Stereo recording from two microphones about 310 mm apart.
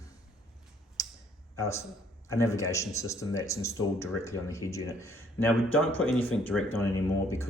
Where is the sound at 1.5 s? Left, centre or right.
Centre.